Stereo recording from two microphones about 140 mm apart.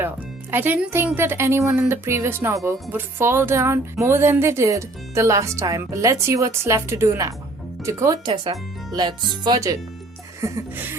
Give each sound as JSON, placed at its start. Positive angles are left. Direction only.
{"t": 0.0, "sound": "speech", "side_deg": -15}